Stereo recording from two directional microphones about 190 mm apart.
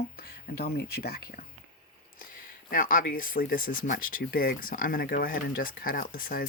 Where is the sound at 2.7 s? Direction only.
45° left (ahead or behind).